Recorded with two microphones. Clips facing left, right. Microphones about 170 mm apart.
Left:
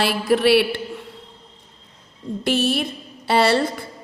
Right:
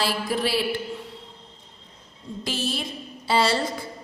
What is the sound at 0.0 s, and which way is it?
Speech, 65° left (ahead or behind).